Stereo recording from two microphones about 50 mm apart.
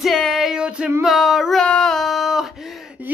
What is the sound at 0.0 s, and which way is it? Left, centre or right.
Music, centre.